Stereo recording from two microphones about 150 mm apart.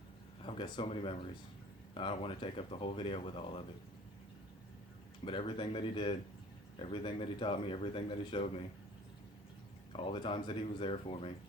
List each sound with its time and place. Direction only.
0.4 s speech: 35° left (ahead or behind)
5.2 s speech: 35° left (ahead or behind)
9.9 s speech: 35° left (ahead or behind)